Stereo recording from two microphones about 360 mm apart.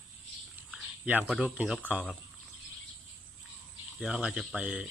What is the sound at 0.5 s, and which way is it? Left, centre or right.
Speech, centre.